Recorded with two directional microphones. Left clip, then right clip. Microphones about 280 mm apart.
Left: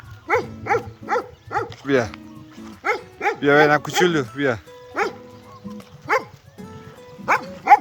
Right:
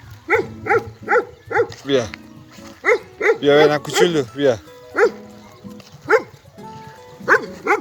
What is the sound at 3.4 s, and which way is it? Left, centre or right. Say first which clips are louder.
Speech: even; centre.